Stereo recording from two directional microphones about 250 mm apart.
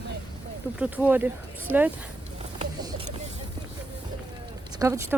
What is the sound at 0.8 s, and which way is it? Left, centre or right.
Speech, centre.